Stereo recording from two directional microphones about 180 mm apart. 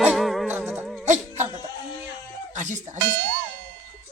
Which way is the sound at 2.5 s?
45° right (ahead or behind).